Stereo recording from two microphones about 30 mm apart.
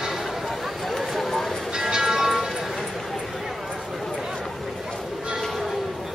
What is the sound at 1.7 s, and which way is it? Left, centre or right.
Music, right.